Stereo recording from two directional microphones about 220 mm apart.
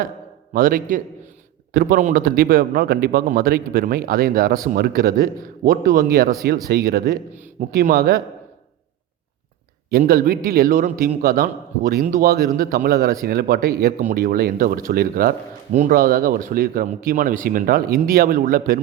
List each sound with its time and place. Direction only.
0.5 s a man's voice: 40° right (ahead or behind)
9.9 s speech: 40° right (ahead or behind)